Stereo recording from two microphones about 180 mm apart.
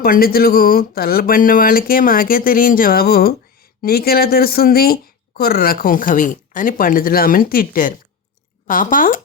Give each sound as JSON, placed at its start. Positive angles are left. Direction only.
{"t": 0.0, "sound": "speech", "side_deg": 55}